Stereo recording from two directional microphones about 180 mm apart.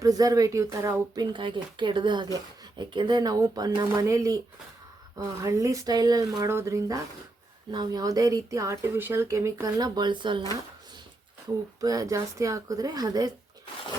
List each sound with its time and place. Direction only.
0.0 s speech: 20° right (ahead or behind)
11.8 s speech: 20° right (ahead or behind)